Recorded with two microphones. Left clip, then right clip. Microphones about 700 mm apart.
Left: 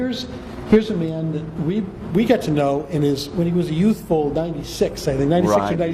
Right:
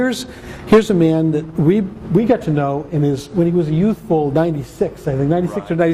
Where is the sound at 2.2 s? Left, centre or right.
Right.